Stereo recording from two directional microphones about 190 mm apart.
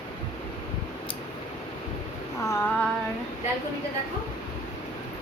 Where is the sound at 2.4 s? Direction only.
15° left (ahead or behind).